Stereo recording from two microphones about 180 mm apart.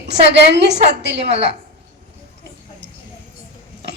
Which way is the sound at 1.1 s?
35° right (ahead or behind).